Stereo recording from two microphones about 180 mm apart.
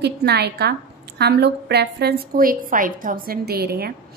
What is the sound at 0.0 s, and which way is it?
A woman's voice, 65° right (ahead or behind).